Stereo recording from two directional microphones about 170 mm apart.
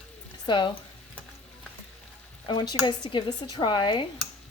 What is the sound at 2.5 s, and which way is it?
Speech, 25° left (ahead or behind).